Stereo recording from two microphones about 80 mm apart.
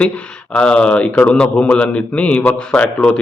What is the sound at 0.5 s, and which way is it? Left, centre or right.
A man's voice, centre.